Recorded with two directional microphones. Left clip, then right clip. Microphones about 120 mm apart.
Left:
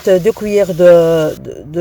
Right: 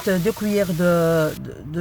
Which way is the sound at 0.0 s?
55° left (ahead or behind).